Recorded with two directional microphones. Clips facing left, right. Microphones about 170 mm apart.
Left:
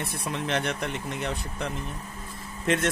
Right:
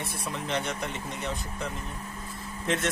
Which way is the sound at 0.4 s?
65° left (ahead or behind).